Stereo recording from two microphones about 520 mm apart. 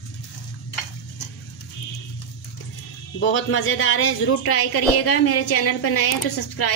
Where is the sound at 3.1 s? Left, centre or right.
Left.